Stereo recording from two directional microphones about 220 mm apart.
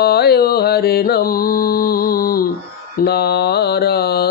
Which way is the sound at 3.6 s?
45° left (ahead or behind).